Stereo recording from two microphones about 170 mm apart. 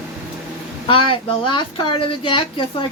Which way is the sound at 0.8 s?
30° left (ahead or behind).